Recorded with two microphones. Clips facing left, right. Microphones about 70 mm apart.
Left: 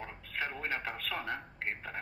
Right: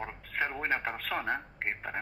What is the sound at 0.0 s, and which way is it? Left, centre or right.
A man's voice, right.